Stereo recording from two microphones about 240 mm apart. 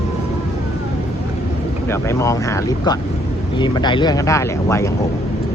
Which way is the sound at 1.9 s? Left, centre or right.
Centre.